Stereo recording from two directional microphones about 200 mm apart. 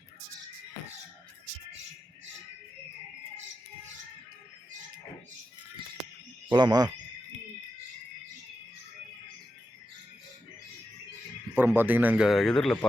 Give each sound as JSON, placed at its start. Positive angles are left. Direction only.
{"t": 6.5, "sound": "speech", "side_deg": -20}
{"t": 11.5, "sound": "a man's voice", "side_deg": -10}